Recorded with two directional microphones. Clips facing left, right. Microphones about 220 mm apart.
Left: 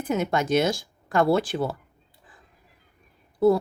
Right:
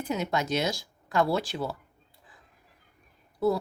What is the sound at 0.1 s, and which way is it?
Speech, 50° left (ahead or behind).